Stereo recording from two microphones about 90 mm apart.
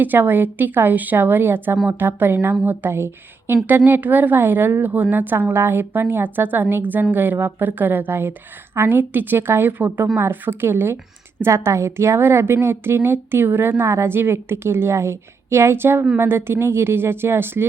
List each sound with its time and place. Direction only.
0.0 s a woman's voice: 25° right (ahead or behind)